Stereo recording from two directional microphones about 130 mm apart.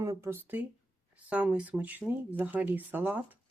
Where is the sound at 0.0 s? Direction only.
25° right (ahead or behind).